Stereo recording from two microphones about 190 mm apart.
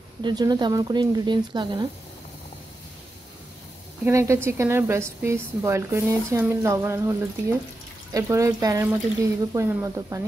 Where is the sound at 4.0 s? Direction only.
15° right (ahead or behind).